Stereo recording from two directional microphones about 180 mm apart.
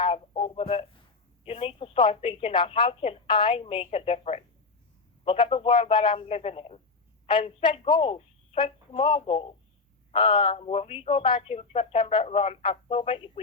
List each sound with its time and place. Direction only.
0.0 s radio: 30° left (ahead or behind)
1.5 s speech: 30° left (ahead or behind)